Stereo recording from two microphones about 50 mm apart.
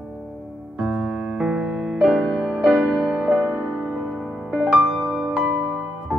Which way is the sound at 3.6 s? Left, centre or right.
Centre.